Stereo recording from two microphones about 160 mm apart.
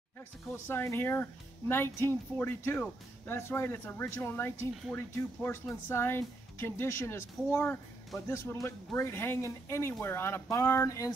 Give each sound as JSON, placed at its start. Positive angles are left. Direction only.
{"t": 0.5, "sound": "speech", "side_deg": 15}